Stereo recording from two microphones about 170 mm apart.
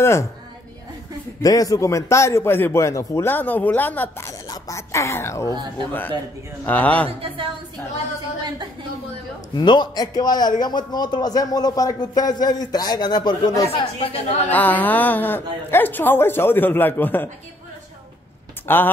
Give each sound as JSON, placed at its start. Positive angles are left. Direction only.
{"t": 0.0, "sound": "a man's voice", "side_deg": 15}
{"t": 1.4, "sound": "a man's voice", "side_deg": 20}
{"t": 7.1, "sound": "a woman's voice", "side_deg": -35}
{"t": 9.6, "sound": "speech", "side_deg": 25}
{"t": 14.5, "sound": "a man's voice", "side_deg": 10}
{"t": 18.7, "sound": "a man's voice", "side_deg": 10}